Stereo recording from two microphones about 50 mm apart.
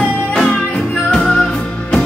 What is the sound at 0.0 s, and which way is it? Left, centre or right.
Music, left.